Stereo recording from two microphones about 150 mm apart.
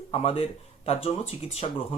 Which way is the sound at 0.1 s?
40° left (ahead or behind).